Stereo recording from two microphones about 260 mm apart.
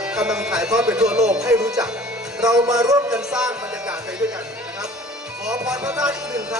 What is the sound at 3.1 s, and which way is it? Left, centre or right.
Music, centre.